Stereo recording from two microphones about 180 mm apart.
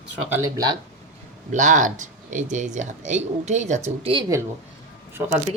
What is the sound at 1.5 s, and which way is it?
Speech, 45° right (ahead or behind).